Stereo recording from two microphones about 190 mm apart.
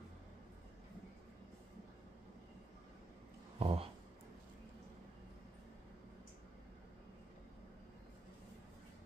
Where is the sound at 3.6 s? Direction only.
30° right (ahead or behind).